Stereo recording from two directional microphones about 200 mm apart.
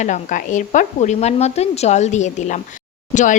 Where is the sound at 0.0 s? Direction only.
40° left (ahead or behind).